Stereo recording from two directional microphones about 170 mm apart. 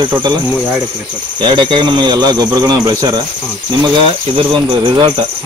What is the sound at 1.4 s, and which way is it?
A man's voice, 25° right (ahead or behind).